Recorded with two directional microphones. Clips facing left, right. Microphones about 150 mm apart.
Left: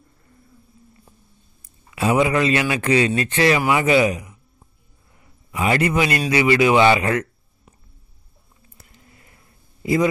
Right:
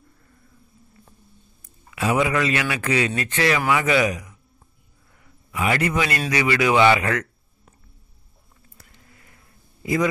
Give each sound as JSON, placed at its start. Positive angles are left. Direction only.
{"t": 2.0, "sound": "speech", "side_deg": 25}
{"t": 5.5, "sound": "speech", "side_deg": 25}